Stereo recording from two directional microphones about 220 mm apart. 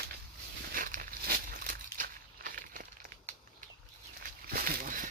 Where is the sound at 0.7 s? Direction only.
40° right (ahead or behind).